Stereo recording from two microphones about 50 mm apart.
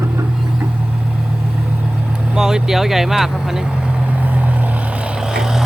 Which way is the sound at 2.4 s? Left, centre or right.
Centre.